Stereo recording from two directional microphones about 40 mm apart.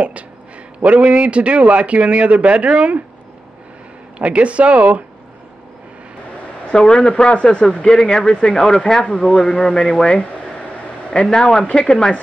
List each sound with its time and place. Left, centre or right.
0.8 s a man's voice: right
4.2 s a man's voice: right
6.7 s a man's voice: centre
11.3 s a man's voice: centre